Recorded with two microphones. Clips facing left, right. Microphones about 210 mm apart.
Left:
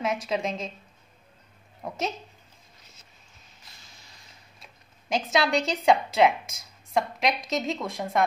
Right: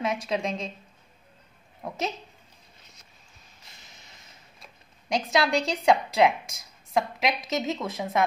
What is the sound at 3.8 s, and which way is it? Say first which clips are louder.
Creak: right 1 dB; 20° right (ahead or behind).